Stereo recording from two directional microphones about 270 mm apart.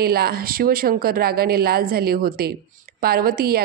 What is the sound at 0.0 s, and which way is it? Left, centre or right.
A woman's voice, right.